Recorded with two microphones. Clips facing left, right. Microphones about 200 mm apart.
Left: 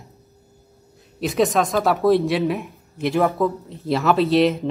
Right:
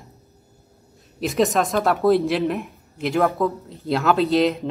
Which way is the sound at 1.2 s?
Centre (ahead or behind).